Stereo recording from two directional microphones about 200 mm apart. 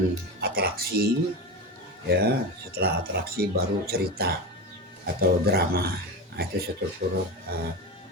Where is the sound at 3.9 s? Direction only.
50° right (ahead or behind).